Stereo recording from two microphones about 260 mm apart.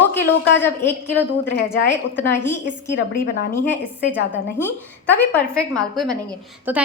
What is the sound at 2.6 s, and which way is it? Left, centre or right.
Speech, left.